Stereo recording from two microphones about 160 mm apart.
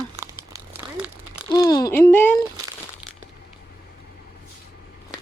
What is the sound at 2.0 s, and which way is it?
Speech, 15° left (ahead or behind).